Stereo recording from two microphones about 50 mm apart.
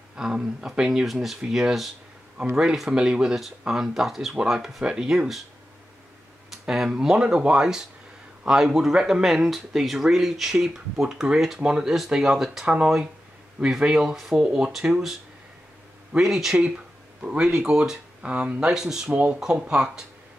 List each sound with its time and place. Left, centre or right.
0.1 s speech: centre
6.7 s speech: centre
14.4 s speech: centre
16.2 s speech: centre
17.2 s speech: right
18.2 s speech: right
18.7 s speech: centre